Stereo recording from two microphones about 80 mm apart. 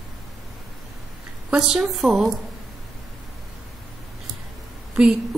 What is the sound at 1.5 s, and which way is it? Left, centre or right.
Speech, centre.